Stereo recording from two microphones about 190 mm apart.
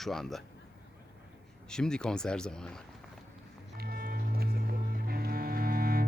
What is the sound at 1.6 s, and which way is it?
Speech, 5° left (ahead or behind).